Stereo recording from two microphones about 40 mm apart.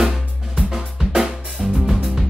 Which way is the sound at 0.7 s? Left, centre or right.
Centre.